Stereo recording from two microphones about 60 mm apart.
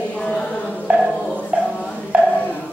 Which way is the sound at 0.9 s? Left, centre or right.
Centre.